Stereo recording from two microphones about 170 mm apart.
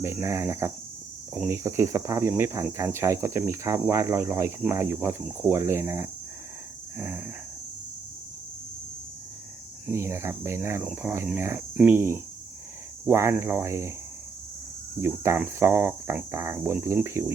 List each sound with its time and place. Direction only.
0.0 s speech: 15° right (ahead or behind)
9.8 s speech: 15° right (ahead or behind)
14.9 s speech: 15° right (ahead or behind)